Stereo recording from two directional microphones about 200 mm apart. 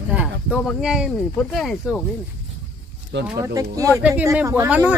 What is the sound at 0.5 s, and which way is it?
Speech, centre (ahead or behind).